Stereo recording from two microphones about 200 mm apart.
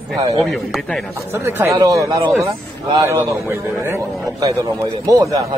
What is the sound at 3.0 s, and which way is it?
Speech, 15° right (ahead or behind).